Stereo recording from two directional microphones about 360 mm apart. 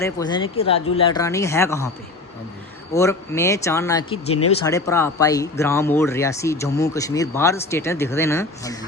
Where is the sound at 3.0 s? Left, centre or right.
Centre.